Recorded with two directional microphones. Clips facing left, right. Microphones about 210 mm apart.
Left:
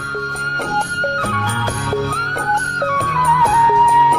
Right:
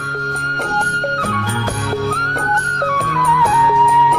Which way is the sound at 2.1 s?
Centre (ahead or behind).